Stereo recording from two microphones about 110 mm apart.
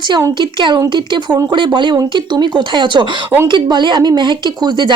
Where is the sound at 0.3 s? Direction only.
45° right (ahead or behind).